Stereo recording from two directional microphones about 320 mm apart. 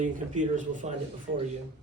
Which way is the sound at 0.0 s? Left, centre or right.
Right.